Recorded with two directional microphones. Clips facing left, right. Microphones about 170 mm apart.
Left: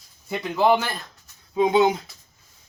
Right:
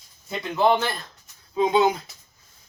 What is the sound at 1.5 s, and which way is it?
Speech, 20° left (ahead or behind).